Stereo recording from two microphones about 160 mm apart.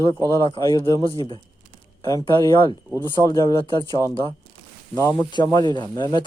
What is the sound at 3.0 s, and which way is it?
Speech, 25° left (ahead or behind).